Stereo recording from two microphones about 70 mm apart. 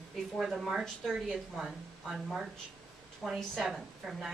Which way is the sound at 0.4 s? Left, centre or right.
Centre.